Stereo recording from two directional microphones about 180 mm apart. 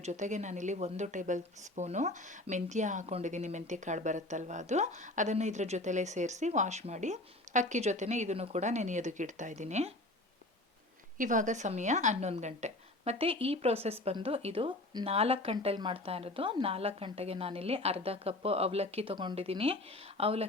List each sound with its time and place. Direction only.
0.0 s speech: 40° right (ahead or behind)
11.2 s speech: 45° right (ahead or behind)